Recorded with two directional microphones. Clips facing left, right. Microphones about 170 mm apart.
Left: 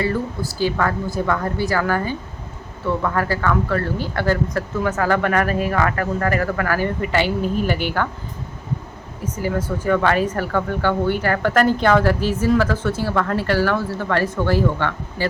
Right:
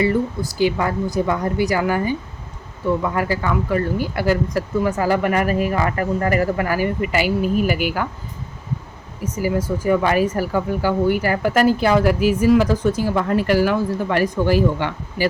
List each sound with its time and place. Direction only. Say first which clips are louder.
0.6 s speech: right 2 dB; 15° right (ahead or behind)
9.2 s speech: right 2 dB; 10° right (ahead or behind)